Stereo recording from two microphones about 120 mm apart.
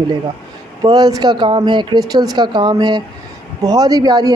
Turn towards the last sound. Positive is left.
turn(degrees=-35)  # may be behind; listen again after turning